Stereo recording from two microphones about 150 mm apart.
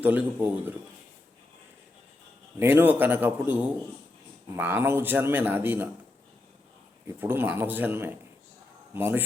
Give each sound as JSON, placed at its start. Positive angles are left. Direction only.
{"t": 0.0, "sound": "speech", "side_deg": -10}
{"t": 2.6, "sound": "speech", "side_deg": -15}
{"t": 7.2, "sound": "speech", "side_deg": -15}